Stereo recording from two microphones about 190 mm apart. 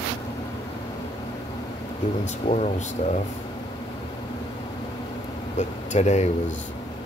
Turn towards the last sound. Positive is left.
turn(degrees=35)  # may be behind; listen again after turning